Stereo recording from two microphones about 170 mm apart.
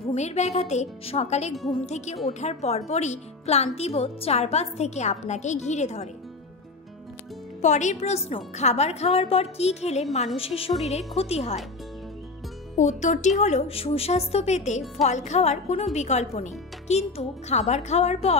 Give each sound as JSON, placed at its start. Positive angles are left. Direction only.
{"t": 0.1, "sound": "speech", "side_deg": 40}
{"t": 7.6, "sound": "speech", "side_deg": 45}
{"t": 12.7, "sound": "speech", "side_deg": 45}